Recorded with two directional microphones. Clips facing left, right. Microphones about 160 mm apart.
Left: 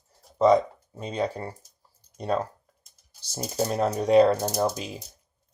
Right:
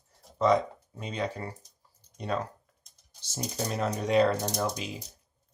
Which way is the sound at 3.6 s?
35° left (ahead or behind).